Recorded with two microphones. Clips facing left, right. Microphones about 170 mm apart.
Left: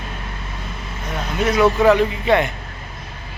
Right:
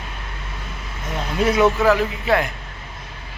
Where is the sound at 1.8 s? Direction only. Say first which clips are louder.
Left 3 dB; centre (ahead or behind).